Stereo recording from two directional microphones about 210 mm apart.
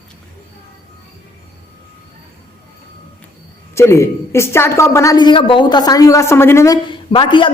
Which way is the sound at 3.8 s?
15° left (ahead or behind).